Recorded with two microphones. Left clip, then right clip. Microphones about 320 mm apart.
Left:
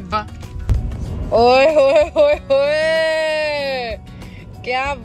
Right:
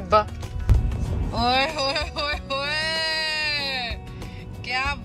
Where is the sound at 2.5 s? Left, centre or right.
Centre.